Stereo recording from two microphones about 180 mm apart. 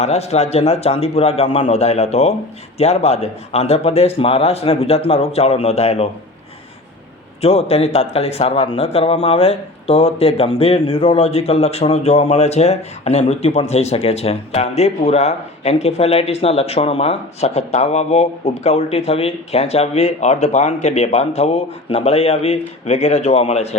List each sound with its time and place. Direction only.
0.0 s speech: 35° left (ahead or behind)
7.4 s speech: 35° left (ahead or behind)